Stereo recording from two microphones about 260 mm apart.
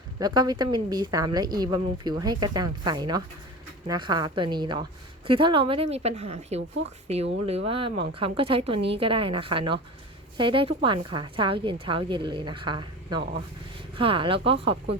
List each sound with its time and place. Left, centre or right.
0.2 s a woman's voice: centre